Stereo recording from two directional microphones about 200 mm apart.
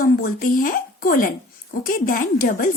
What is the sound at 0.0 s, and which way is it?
Speech, 45° left (ahead or behind).